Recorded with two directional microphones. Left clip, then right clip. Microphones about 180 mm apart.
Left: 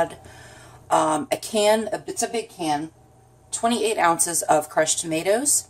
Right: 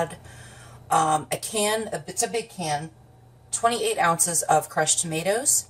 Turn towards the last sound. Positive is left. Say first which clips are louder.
# left 3 dB
turn(degrees=45)  # may be behind; listen again after turning